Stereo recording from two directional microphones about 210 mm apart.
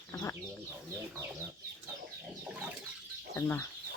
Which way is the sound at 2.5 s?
5° right (ahead or behind).